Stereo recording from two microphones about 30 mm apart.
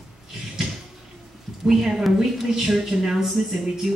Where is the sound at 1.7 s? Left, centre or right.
Centre.